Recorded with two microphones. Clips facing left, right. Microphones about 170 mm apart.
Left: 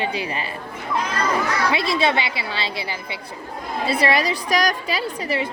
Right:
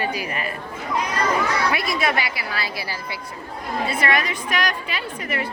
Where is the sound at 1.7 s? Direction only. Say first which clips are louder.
Left 3 dB; 25° left (ahead or behind).